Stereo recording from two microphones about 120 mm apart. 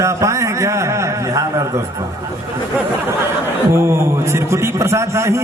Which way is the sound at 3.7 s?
25° right (ahead or behind).